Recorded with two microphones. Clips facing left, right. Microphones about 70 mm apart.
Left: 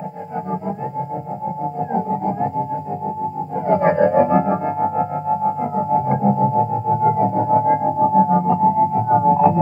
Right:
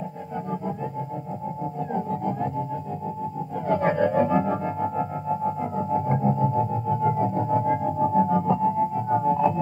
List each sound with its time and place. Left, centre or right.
1.8 s music: left
3.6 s music: left